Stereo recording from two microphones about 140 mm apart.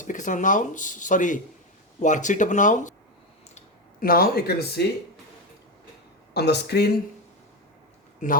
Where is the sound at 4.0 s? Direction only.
90° left.